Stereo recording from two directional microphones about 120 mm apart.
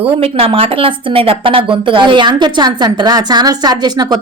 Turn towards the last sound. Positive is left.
turn(degrees=-35)  # may be behind; listen again after turning